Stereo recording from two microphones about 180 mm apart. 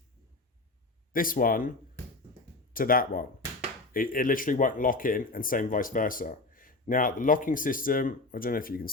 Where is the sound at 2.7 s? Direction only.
50° left (ahead or behind).